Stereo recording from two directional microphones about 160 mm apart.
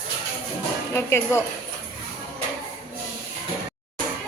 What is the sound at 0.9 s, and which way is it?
Speech, 15° left (ahead or behind).